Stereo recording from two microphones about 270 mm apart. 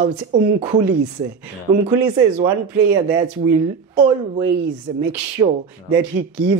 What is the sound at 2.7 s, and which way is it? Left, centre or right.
Speech, centre.